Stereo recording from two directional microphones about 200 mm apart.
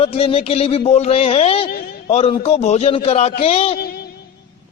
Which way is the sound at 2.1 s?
30° left (ahead or behind).